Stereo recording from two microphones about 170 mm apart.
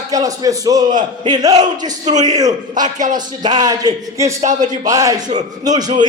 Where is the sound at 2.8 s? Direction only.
50° right (ahead or behind).